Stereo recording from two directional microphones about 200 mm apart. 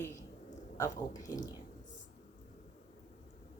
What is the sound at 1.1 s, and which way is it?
Speech, 20° left (ahead or behind).